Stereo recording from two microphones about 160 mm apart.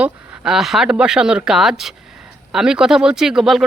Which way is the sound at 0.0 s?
5° right (ahead or behind).